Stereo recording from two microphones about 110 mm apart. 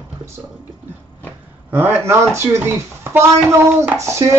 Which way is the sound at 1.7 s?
15° right (ahead or behind).